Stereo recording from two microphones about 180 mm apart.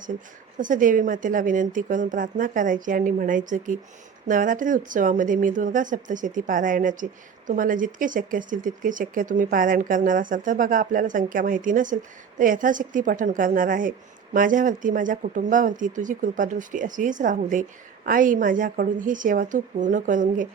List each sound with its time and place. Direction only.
0.6 s speech: 45° right (ahead or behind)